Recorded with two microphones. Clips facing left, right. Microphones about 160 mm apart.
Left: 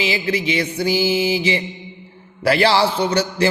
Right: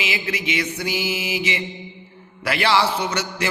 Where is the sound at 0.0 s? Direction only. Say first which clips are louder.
Left 6 dB; 30° left (ahead or behind).